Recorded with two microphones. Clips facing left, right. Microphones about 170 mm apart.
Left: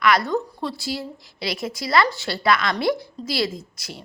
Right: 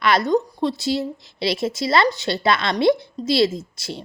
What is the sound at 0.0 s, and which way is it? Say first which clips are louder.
A woman's voice: right 2 dB; 25° right (ahead or behind).